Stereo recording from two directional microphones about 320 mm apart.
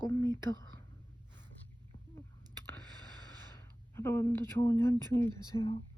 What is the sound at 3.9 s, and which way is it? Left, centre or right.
Speech, centre.